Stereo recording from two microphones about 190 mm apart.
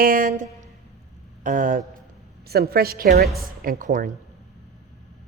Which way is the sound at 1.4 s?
45° right (ahead or behind).